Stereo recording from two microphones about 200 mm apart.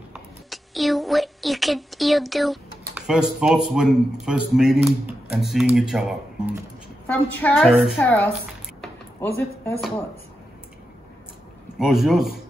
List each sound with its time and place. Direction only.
0.1 s a woman's voice: centre (ahead or behind)
7.1 s a woman's voice: 10° left (ahead or behind)
7.5 s a man's voice: centre (ahead or behind)
8.0 s a woman's voice: 10° left (ahead or behind)
8.8 s a sound: 10° left (ahead or behind)
11.8 s a man's voice: centre (ahead or behind)